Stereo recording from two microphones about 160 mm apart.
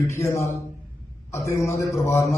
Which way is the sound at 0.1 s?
15° left (ahead or behind).